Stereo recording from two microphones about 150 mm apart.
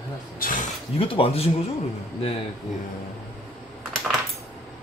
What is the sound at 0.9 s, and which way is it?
Speech, 40° left (ahead or behind).